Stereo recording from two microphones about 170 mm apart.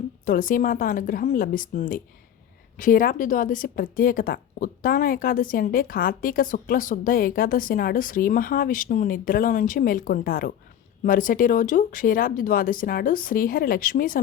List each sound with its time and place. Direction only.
0.3 s a woman's voice: 55° left (ahead or behind)